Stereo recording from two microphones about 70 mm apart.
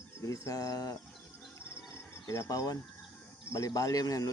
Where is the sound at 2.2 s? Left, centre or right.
Left.